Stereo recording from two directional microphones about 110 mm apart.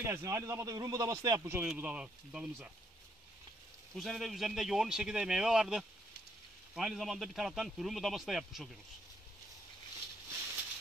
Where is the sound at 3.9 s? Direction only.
Centre (ahead or behind).